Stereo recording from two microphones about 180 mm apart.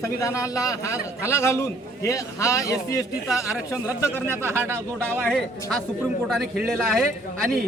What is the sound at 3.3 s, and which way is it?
Speech, centre (ahead or behind).